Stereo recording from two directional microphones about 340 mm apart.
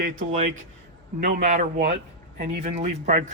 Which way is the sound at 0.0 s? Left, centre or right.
Right.